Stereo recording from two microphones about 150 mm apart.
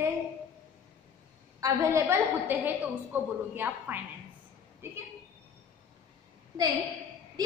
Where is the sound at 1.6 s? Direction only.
20° right (ahead or behind).